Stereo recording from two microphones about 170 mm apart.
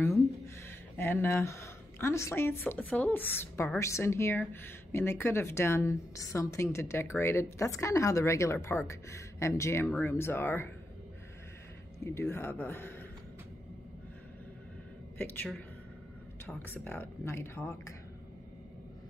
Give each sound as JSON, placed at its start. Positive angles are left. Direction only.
{"t": 0.9, "sound": "a woman's voice", "side_deg": 10}
{"t": 12.0, "sound": "a woman's voice", "side_deg": 15}
{"t": 15.1, "sound": "a woman's voice", "side_deg": 10}